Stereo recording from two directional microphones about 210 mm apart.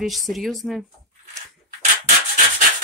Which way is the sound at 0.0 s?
Centre (ahead or behind).